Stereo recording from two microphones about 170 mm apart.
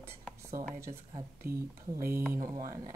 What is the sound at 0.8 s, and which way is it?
Speech, 15° right (ahead or behind).